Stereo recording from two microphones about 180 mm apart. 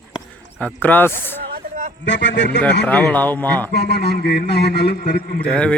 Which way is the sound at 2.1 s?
75° left (ahead or behind).